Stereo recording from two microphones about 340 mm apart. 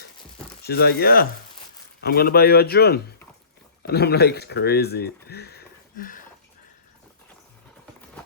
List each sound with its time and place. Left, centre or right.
0.6 s speech: left